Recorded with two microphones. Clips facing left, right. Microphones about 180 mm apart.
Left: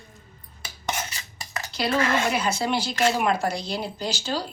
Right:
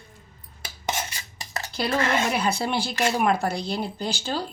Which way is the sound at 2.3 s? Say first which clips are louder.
Even; 55° right (ahead or behind).